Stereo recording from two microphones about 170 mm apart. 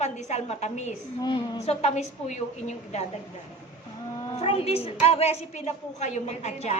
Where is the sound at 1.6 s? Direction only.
40° left (ahead or behind).